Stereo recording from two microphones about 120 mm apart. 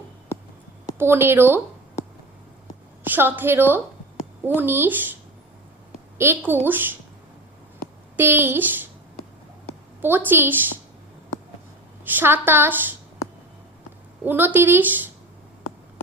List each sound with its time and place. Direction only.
0.9 s speech: 20° right (ahead or behind)
3.0 s a woman's voice: 15° right (ahead or behind)
6.1 s a woman's voice: 20° right (ahead or behind)
8.1 s a woman's voice: 15° right (ahead or behind)
10.0 s a woman's voice: 15° right (ahead or behind)
12.0 s a woman's voice: 15° right (ahead or behind)
14.3 s a woman's voice: 15° right (ahead or behind)